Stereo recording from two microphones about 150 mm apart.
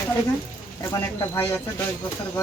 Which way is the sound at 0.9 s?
20° left (ahead or behind).